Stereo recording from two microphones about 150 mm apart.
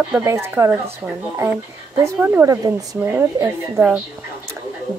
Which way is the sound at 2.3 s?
20° right (ahead or behind).